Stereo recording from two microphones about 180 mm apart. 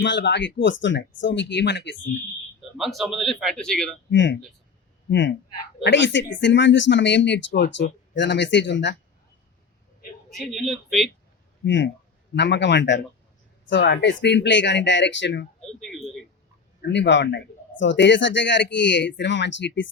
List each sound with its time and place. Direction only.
0.0 s speech: 80° left
2.7 s a man's voice: centre (ahead or behind)
4.1 s speech: 90° left
5.8 s speech: 80° left
10.3 s a man's voice: centre (ahead or behind)
11.6 s speech: 90° left
12.3 s a man's voice: 70° left (ahead or behind); by 15.4 s 90° left
15.8 s a man's voice: centre (ahead or behind)
16.9 s speech: 80° left